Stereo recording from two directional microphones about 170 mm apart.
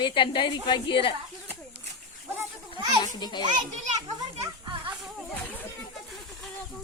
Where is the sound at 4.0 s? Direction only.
20° right (ahead or behind).